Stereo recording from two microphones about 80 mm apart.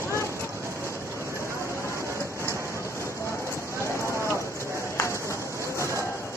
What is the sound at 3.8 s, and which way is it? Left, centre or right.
Run, left.